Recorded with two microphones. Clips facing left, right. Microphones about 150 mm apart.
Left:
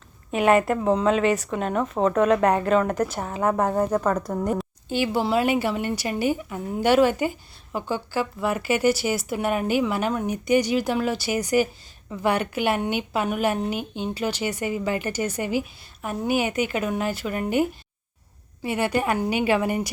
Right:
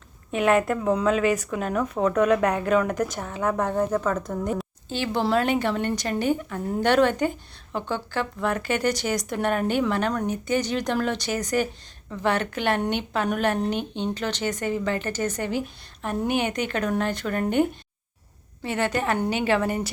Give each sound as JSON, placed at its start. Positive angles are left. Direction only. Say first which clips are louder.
{"t": 0.3, "sound": "speech", "louder": "left 2 dB", "side_deg": 0}
{"t": 2.0, "sound": "speech", "louder": "left 1 dB", "side_deg": 30}
{"t": 2.3, "sound": "speech", "louder": "left 2 dB", "side_deg": 0}